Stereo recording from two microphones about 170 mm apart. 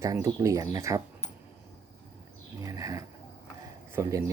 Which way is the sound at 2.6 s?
20° right (ahead or behind).